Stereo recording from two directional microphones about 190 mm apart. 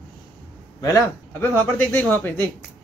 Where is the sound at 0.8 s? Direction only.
15° left (ahead or behind).